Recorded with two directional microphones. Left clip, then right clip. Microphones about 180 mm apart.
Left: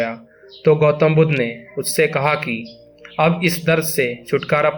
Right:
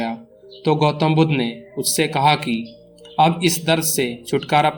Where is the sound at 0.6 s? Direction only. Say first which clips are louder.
Left 4 dB; 30° right (ahead or behind).